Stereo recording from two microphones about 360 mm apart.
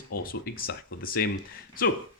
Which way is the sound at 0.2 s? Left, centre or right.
Left.